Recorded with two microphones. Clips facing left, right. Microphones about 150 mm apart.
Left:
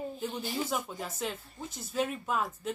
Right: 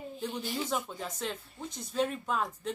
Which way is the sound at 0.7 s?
5° left (ahead or behind).